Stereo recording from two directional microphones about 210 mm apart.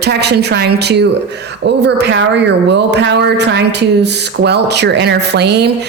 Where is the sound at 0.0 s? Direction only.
50° right (ahead or behind).